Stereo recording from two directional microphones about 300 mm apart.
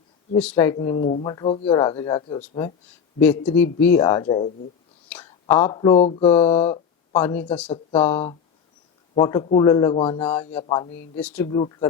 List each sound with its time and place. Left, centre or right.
0.3 s speech: centre
7.1 s speech: centre
7.7 s speech: centre
9.1 s speech: centre
11.2 s speech: centre
11.4 s speech: centre